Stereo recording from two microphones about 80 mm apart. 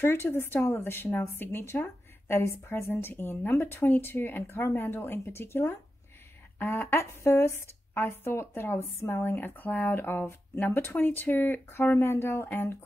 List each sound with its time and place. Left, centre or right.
0.0 s speech: left